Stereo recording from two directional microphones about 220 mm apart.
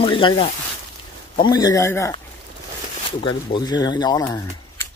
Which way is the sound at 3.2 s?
20° left (ahead or behind).